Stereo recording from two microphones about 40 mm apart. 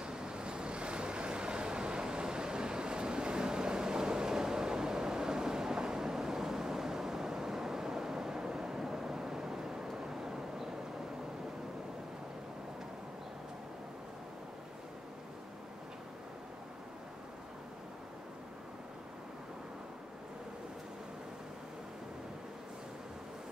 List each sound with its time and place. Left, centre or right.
0.0 s waves: centre